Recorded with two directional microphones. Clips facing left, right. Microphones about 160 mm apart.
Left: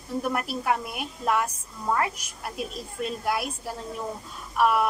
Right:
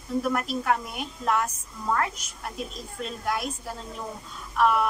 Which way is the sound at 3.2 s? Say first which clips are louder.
Even; 10° left (ahead or behind).